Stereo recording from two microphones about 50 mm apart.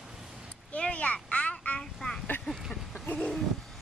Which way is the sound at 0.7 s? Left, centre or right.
Left.